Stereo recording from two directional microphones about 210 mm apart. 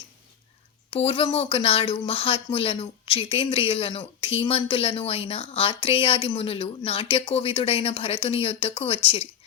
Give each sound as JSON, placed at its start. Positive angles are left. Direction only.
{"t": 0.9, "sound": "speech", "side_deg": 25}